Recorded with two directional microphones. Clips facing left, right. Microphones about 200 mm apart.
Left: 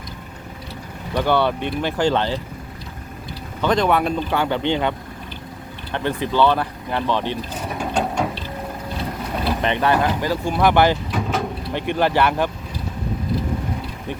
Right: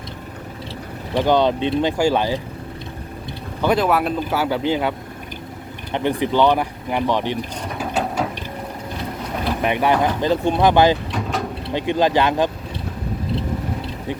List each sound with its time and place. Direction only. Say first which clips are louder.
1.1 s speech: right 2 dB; 20° right (ahead or behind)
3.6 s speech: even; 5° right (ahead or behind)
5.9 s speech: right 3 dB; 15° right (ahead or behind)
7.8 s ratchet: even; 5° right (ahead or behind)
9.4 s speech: right 1 dB; 10° right (ahead or behind)
11.1 s vehicle: left 1 dB; centre (ahead or behind)
11.6 s speech: right 4 dB; 15° right (ahead or behind)